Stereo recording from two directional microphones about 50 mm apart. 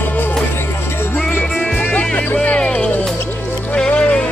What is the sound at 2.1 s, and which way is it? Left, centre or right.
Speech, left.